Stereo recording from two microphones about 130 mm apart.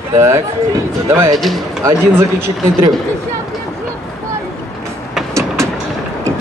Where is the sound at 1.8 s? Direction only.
20° right (ahead or behind).